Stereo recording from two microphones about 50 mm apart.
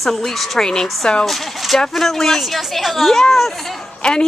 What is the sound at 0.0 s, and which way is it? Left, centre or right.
Speech, centre.